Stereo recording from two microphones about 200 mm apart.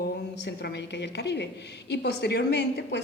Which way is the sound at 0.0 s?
55° left (ahead or behind).